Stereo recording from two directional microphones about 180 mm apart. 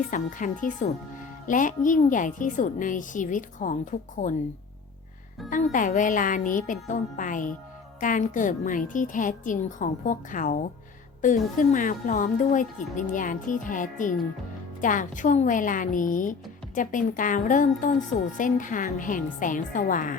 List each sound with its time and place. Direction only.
0.1 s a woman's voice: 45° left (ahead or behind)
5.4 s speech: centre (ahead or behind)
5.7 s a woman's voice: 45° left (ahead or behind)